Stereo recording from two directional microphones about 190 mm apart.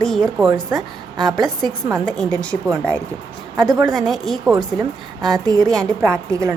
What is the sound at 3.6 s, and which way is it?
Speech, 20° right (ahead or behind).